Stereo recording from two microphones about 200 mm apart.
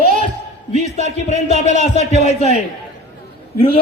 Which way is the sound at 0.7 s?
35° left (ahead or behind).